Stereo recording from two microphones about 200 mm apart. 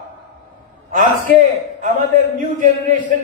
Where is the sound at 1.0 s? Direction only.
40° right (ahead or behind).